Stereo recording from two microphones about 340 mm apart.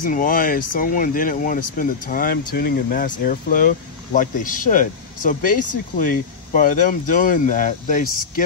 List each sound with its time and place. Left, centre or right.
0.0 s speech: left